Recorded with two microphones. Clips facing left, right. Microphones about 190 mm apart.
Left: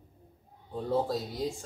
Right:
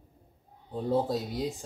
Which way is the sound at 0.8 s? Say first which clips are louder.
Right 2 dB; 15° right (ahead or behind).